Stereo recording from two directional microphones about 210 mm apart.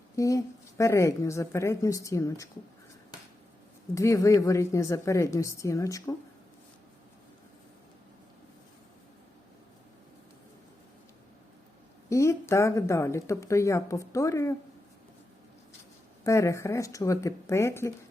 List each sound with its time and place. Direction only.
0.2 s speech: 15° left (ahead or behind)
3.9 s speech: 15° left (ahead or behind)
12.0 s speech: 15° left (ahead or behind)
16.2 s speech: 15° left (ahead or behind)